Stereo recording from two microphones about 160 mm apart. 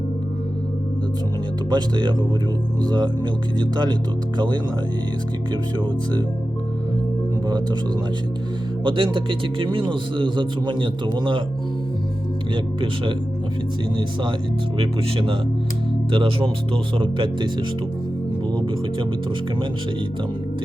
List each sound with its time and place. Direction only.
1.7 s speech: 25° right (ahead or behind)
7.4 s speech: 25° right (ahead or behind)
8.8 s a man's voice: 30° right (ahead or behind)
13.9 s a man's voice: 30° right (ahead or behind)
16.1 s a man's voice: 35° right (ahead or behind)